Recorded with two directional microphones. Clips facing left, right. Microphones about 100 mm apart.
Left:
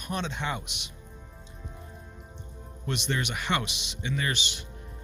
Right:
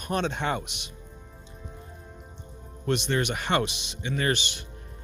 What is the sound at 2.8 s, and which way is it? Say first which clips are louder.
Speech: right 5 dB; 45° right (ahead or behind).